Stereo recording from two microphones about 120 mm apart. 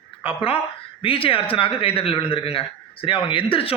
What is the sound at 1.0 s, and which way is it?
Speech, 50° left (ahead or behind).